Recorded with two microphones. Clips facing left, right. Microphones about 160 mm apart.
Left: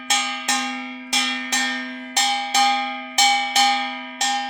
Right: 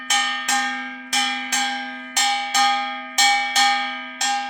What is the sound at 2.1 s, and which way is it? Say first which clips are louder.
Cowbell: left 1 dB; 25° left (ahead or behind).